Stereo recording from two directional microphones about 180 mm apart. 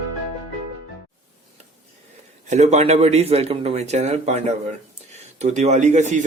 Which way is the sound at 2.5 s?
40° right (ahead or behind).